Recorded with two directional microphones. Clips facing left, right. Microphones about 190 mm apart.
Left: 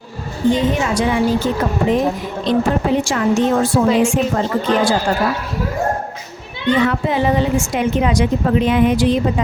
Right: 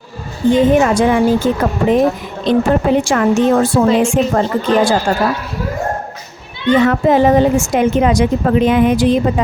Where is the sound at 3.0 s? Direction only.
55° right (ahead or behind).